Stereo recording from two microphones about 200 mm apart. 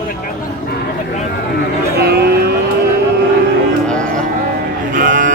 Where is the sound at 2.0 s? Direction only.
55° right (ahead or behind).